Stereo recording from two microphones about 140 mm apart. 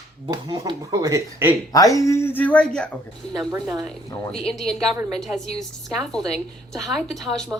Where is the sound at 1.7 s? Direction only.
25° left (ahead or behind); by 2.9 s 5° left (ahead or behind).